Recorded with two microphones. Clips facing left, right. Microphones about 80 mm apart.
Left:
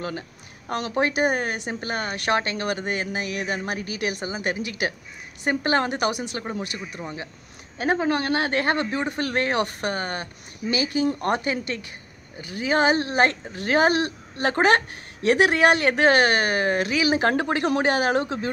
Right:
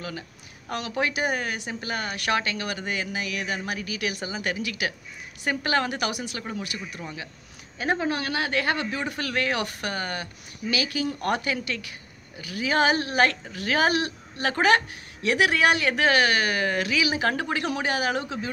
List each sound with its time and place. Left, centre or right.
0.7 s speech: left
8.1 s speech: left